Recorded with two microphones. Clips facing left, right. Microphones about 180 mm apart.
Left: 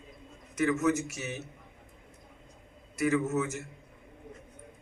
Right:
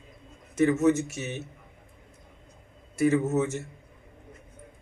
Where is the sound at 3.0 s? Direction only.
35° right (ahead or behind).